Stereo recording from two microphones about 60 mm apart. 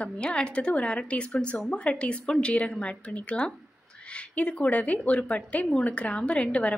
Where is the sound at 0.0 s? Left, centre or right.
Centre.